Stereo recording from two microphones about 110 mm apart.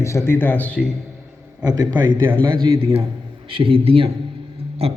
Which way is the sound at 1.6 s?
35° right (ahead or behind).